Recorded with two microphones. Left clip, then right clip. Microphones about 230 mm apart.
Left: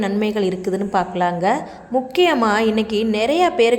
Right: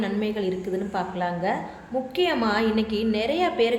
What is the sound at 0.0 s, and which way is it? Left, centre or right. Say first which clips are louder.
A woman's voice: left 7 dB; left.